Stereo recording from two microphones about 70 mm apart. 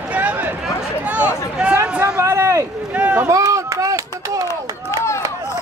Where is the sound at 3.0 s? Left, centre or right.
Centre.